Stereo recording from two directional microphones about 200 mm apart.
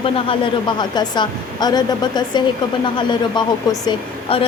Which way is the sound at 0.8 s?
20° left (ahead or behind).